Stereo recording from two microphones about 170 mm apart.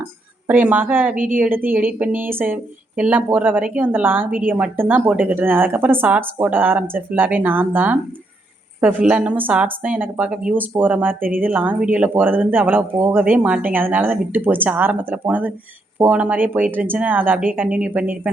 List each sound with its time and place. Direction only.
0.4 s speech: 10° right (ahead or behind)
1.1 s a woman's voice: 55° right (ahead or behind)
1.4 s speech: 10° right (ahead or behind)
11.2 s a woman's voice: 55° right (ahead or behind)
11.4 s speech: 10° right (ahead or behind)